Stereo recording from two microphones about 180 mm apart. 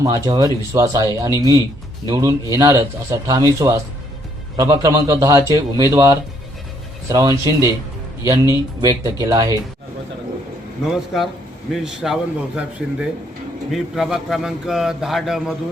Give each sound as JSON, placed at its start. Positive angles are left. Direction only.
{"t": 0.0, "sound": "speech", "side_deg": -20}
{"t": 10.8, "sound": "a man's voice", "side_deg": 0}